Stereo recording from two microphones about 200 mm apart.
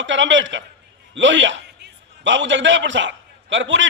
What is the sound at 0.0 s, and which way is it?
A man's voice, 65° right (ahead or behind).